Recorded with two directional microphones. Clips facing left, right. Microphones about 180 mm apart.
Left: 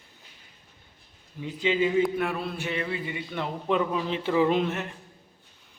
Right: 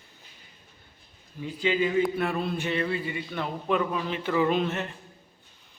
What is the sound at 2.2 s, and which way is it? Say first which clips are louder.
A man's voice: right 1 dB; 10° left (ahead or behind).